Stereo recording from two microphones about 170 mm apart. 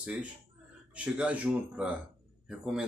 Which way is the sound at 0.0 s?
5° right (ahead or behind).